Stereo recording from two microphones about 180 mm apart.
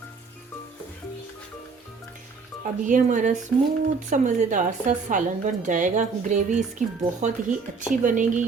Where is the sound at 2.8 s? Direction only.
45° right (ahead or behind).